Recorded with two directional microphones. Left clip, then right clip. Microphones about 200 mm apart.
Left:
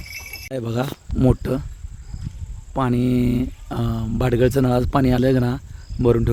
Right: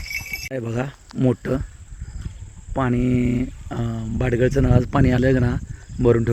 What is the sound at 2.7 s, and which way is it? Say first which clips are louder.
Speech: left 1 dB; 10° left (ahead or behind).